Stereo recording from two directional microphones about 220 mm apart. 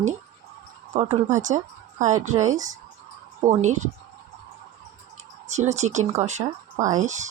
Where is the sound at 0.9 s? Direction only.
30° right (ahead or behind).